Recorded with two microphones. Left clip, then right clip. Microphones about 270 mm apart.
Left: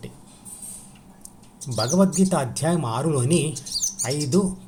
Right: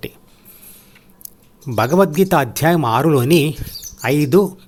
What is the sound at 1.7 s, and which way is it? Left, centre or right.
Speech, right.